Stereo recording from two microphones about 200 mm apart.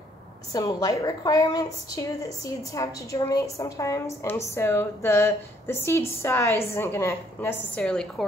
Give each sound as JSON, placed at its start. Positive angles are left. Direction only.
{"t": 0.5, "sound": "a woman's voice", "side_deg": 15}